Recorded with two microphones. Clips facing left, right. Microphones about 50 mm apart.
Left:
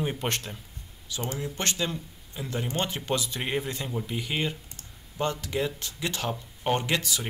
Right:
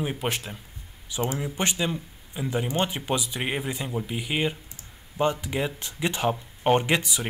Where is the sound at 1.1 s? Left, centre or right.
Centre.